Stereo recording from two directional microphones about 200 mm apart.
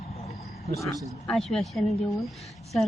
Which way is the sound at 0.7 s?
Centre (ahead or behind).